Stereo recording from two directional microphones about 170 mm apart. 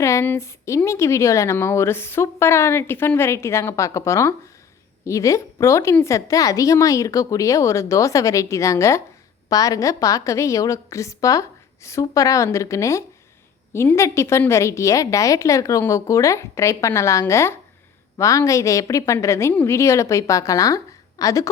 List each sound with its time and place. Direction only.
0.0 s a woman's voice: 15° left (ahead or behind)